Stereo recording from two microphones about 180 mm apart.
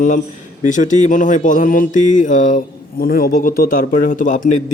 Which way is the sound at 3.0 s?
55° left (ahead or behind).